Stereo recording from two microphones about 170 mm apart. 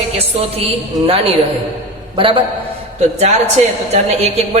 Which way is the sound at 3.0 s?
40° right (ahead or behind).